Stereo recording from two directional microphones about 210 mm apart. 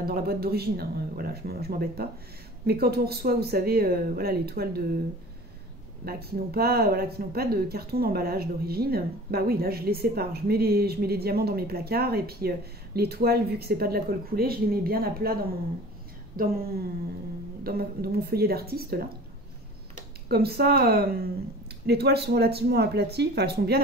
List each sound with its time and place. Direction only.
0.0 s speech: 50° right (ahead or behind)
6.0 s speech: 45° right (ahead or behind)
17.6 s speech: 45° right (ahead or behind)
20.2 s speech: 50° right (ahead or behind)